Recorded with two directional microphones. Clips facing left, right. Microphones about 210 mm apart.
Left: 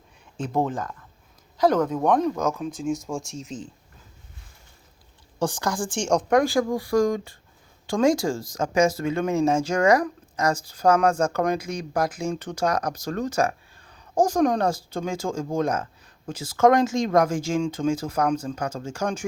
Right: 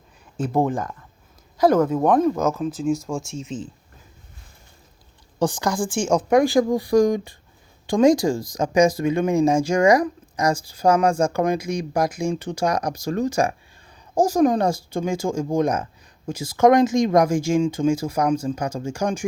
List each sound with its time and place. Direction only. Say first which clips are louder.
0.3 s speech: right 4 dB; 10° right (ahead or behind)
5.4 s speech: right 4 dB; 15° right (ahead or behind)
6.4 s speech: right 4 dB; 20° right (ahead or behind)